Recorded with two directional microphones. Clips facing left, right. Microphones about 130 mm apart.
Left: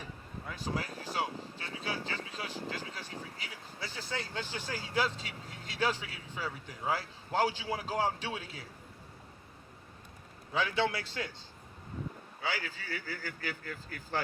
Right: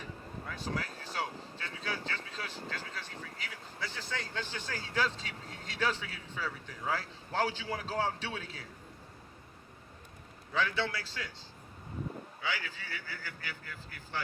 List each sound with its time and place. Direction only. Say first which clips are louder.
0.4 s vehicle: left 1 dB; 15° left (ahead or behind)
2.4 s speech: left 2 dB; 15° left (ahead or behind)
10.5 s speech: left 2 dB; 15° left (ahead or behind)
12.4 s a man's voice: left 2 dB; 40° left (ahead or behind)